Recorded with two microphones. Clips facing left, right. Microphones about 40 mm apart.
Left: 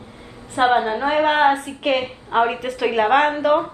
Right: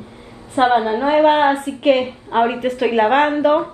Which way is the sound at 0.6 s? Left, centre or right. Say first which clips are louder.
Right 2 dB; centre.